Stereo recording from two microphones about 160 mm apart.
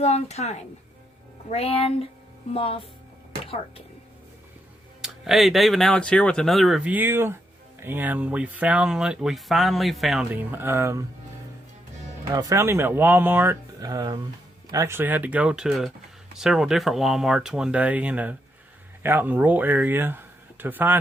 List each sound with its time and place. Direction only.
0.0 s speech: 40° left (ahead or behind)
5.0 s speech: centre (ahead or behind)
12.3 s speech: 25° right (ahead or behind)